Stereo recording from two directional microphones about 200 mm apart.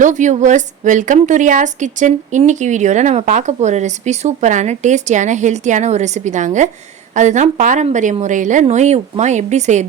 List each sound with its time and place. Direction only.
0.0 s a woman's voice: 40° right (ahead or behind)